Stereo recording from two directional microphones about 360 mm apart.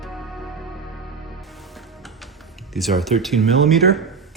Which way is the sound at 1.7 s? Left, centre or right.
Centre.